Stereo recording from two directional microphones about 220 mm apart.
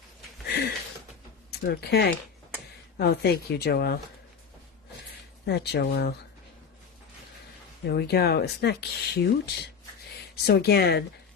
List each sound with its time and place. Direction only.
0.4 s a sound: 45° left (ahead or behind)
1.5 s speech: 45° left (ahead or behind)
5.5 s speech: 45° left (ahead or behind)
7.9 s speech: 45° left (ahead or behind)
10.4 s speech: 50° left (ahead or behind)